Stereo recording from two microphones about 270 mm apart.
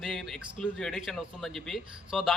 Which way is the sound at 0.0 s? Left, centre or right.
Centre.